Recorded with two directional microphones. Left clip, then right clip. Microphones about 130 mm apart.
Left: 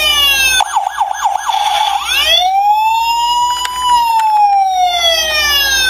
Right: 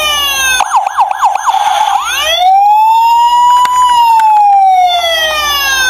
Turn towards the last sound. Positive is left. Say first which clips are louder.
# right 1 dB
turn(degrees=-40)  # may be behind; listen again after turning